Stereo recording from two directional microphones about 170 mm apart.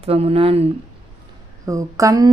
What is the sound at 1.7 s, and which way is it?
Speech, 20° right (ahead or behind).